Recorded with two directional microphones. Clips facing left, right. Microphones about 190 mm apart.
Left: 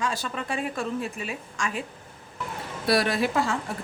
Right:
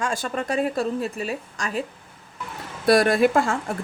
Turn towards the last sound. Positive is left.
turn(degrees=-50)  # may be behind; listen again after turning